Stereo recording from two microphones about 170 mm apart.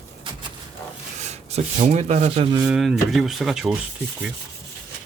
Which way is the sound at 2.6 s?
5° right (ahead or behind).